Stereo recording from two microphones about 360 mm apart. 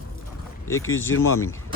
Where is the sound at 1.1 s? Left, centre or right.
Left.